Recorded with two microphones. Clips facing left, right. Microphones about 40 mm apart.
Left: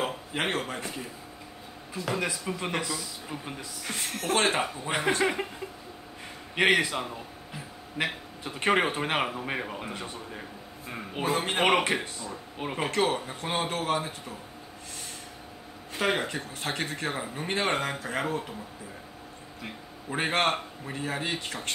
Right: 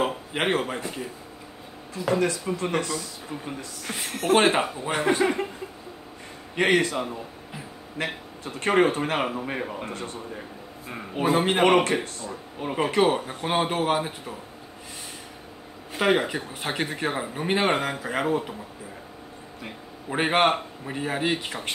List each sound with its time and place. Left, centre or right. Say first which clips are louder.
0.0 s a man's voice: right 4 dB; centre
2.1 s speech: right 7 dB; centre
3.8 s speech: right 4 dB; centre
5.2 s speech: right 3 dB; centre
6.6 s speech: right 2 dB; centre
8.0 s a man's voice: even; left
8.5 s speech: right 4 dB; centre
9.2 s speech: right 3 dB; centre
9.9 s speech: right 3 dB; centre
10.9 s speech: right 5 dB; centre
11.8 s speech: right 3 dB; centre
12.7 s speech: right 5 dB; centre
16.0 s speech: right 5 dB; centre
20.1 s speech: right 5 dB; centre